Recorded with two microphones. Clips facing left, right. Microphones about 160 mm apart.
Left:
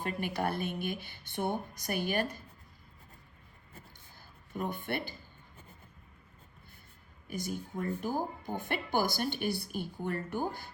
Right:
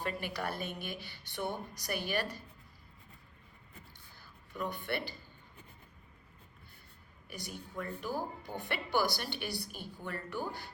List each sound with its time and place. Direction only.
0.0 s speech: 50° left (ahead or behind)
4.2 s speech: 50° left (ahead or behind)
7.3 s speech: 45° left (ahead or behind)